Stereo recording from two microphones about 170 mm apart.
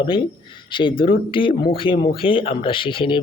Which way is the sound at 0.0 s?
25° left (ahead or behind).